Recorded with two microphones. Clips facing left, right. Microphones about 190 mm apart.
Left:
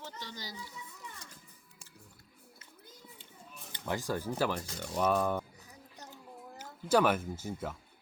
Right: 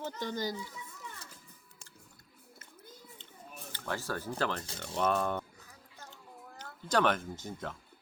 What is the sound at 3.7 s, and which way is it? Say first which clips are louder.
Speech: left 3 dB; 15° left (ahead or behind).